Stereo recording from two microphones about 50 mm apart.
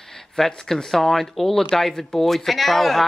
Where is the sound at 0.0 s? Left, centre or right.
Centre.